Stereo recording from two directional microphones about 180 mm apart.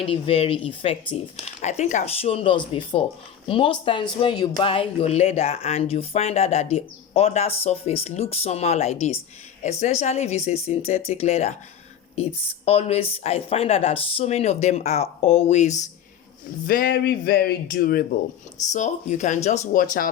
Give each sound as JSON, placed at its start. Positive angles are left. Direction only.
{"t": 0.0, "sound": "speech", "side_deg": 30}
{"t": 1.6, "sound": "speech", "side_deg": 40}
{"t": 16.6, "sound": "speech", "side_deg": 55}
{"t": 18.7, "sound": "speech", "side_deg": 40}